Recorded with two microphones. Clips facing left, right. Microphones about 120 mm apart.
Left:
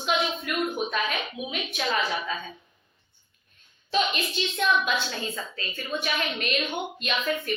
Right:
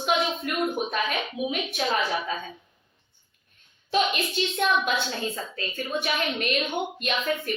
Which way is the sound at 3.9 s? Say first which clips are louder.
Right 2 dB; 45° right (ahead or behind).